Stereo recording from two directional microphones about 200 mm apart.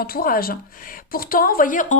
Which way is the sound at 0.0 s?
45° left (ahead or behind).